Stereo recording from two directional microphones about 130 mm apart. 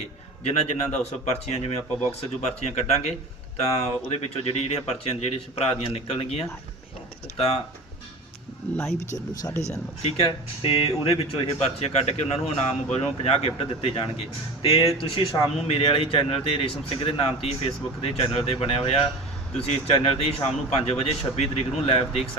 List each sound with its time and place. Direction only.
0.4 s speech: 60° left (ahead or behind)
8.7 s speech: 5° left (ahead or behind)
9.6 s speech: 55° left (ahead or behind)
10.2 s speech: 45° left (ahead or behind)